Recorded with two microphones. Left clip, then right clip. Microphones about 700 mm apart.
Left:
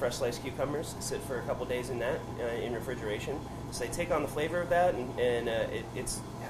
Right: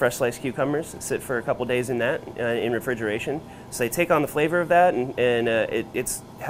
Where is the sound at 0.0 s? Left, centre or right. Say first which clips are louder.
Right 9 dB; right.